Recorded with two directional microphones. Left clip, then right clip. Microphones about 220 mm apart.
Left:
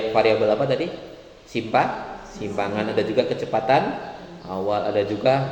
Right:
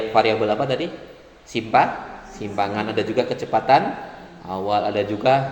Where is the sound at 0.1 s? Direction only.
35° right (ahead or behind).